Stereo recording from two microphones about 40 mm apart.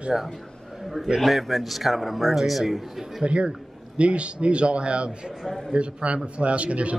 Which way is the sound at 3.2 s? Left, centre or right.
Right.